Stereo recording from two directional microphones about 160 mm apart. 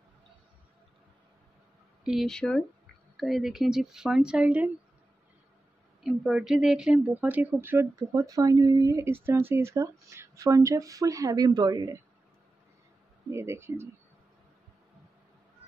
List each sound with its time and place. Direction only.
2.0 s speech: centre (ahead or behind)
6.0 s speech: 5° right (ahead or behind); by 12.0 s 25° right (ahead or behind)
13.3 s speech: 15° right (ahead or behind)